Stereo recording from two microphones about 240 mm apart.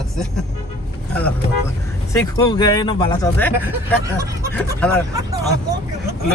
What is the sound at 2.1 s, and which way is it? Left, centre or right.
Speech, centre.